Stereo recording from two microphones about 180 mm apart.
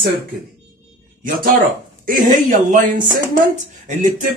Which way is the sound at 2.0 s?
50° right (ahead or behind).